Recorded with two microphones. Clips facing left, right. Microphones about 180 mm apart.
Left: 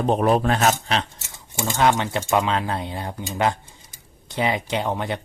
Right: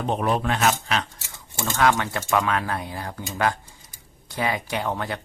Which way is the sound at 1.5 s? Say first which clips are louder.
Left 1 dB; 20° left (ahead or behind).